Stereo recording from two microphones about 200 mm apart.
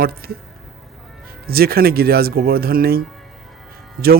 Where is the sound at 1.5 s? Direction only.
50° right (ahead or behind).